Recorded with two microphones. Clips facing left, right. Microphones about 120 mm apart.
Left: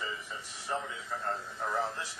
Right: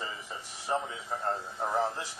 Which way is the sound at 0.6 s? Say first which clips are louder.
Right 4 dB; 30° right (ahead or behind).